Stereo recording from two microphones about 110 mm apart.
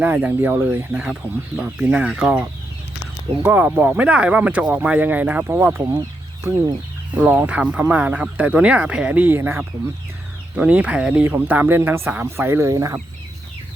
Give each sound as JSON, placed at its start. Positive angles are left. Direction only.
{"t": 0.0, "sound": "speech", "side_deg": -15}
{"t": 7.1, "sound": "speech", "side_deg": -15}